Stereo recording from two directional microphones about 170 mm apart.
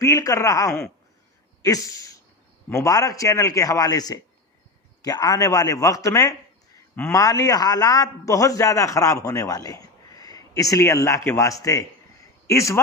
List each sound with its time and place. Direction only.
0.0 s a man's voice: 20° left (ahead or behind)